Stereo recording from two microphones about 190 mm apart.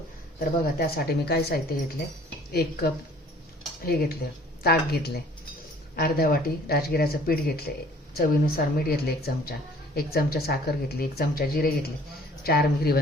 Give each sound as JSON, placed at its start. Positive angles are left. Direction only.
{"t": 0.3, "sound": "speech", "side_deg": 50}
{"t": 4.6, "sound": "speech", "side_deg": 55}